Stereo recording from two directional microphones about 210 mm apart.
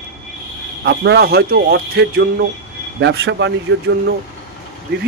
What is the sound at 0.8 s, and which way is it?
Speech, 50° right (ahead or behind).